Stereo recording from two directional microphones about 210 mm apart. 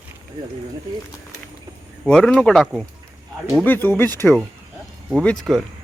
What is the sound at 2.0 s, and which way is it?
Speech, 5° left (ahead or behind).